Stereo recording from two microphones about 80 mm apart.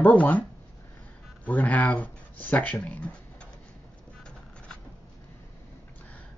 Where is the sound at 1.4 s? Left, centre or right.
Centre.